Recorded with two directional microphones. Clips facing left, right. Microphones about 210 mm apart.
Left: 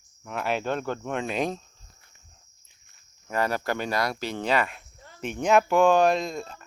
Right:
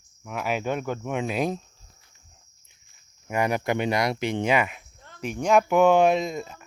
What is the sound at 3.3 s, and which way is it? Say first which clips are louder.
Speech: right 2 dB; 15° right (ahead or behind).